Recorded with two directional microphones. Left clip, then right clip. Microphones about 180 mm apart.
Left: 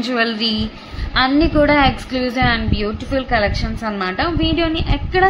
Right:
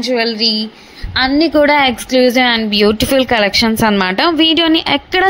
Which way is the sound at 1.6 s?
30° right (ahead or behind).